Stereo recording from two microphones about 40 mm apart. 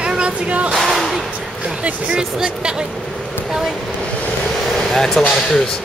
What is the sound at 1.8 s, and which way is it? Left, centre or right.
Speech, right.